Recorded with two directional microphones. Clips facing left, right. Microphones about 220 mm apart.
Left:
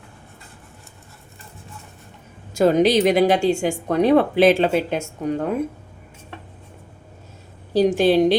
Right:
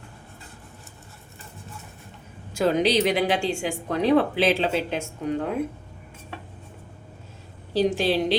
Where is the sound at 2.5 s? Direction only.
45° left (ahead or behind).